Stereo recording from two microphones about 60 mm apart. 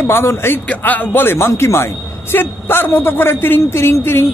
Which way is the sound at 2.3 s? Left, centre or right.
Left.